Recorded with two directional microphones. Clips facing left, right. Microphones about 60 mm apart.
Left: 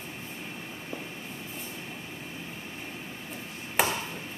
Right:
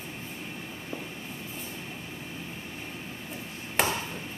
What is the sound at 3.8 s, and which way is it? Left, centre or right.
Chop, centre.